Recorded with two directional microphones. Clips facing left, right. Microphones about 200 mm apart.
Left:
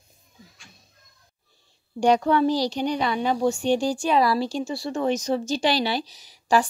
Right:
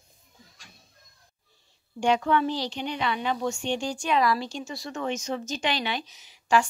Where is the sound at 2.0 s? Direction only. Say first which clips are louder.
Left 4 dB; 40° left (ahead or behind).